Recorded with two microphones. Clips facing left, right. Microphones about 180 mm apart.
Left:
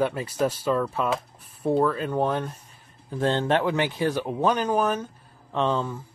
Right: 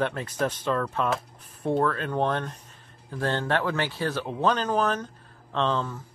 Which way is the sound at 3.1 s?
20° left (ahead or behind).